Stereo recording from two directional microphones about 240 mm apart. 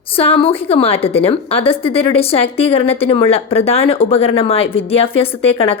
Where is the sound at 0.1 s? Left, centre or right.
Left.